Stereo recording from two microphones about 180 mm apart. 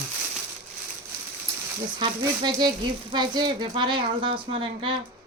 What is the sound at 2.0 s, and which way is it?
Speech, 25° right (ahead or behind).